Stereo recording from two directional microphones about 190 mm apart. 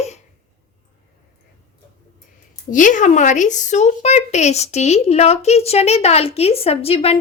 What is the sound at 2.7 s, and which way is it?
Speech, 40° left (ahead or behind).